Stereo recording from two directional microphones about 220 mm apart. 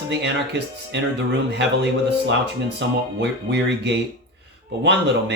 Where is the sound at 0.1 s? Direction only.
50° right (ahead or behind).